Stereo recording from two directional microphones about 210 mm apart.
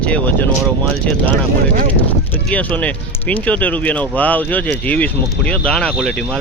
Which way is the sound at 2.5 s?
5° left (ahead or behind).